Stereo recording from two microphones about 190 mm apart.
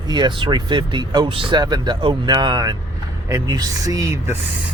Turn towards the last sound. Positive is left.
turn(degrees=-15)  # may be behind; listen again after turning